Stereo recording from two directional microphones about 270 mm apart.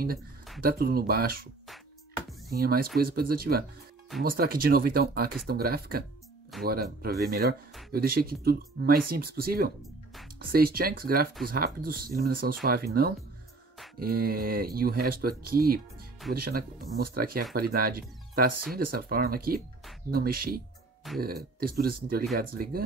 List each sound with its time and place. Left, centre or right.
0.6 s speech: right
2.5 s speech: right
14.1 s speech: right